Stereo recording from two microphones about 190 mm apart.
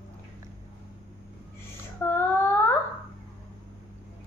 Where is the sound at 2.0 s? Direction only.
10° left (ahead or behind).